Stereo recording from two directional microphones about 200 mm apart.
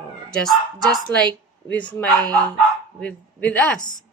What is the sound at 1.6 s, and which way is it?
A woman's voice, 5° left (ahead or behind).